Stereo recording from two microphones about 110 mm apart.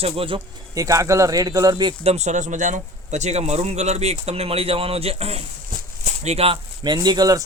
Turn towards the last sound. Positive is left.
turn(degrees=-35)  # may be behind; listen again after turning